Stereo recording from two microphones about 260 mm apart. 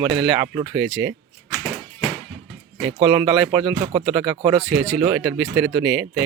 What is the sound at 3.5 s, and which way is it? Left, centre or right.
Speech, centre.